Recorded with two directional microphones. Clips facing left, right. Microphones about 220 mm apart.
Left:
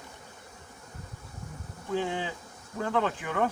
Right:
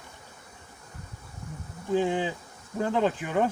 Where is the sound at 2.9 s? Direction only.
20° right (ahead or behind).